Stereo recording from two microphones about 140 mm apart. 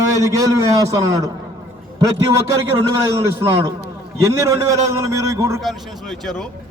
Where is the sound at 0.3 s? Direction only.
25° right (ahead or behind).